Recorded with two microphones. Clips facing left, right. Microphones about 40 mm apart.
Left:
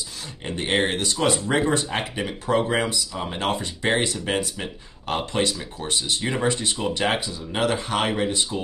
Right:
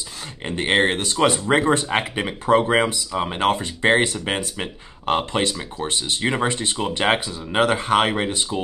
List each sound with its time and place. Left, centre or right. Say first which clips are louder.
0.6 s speech: right 4 dB; right